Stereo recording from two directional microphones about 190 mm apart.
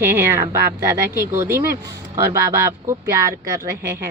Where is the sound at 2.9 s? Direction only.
15° right (ahead or behind).